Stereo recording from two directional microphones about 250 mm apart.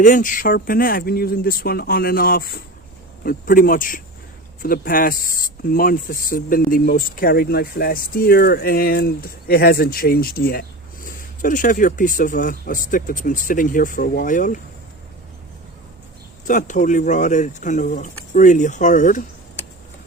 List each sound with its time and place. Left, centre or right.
0.0 s speech: left
16.5 s speech: left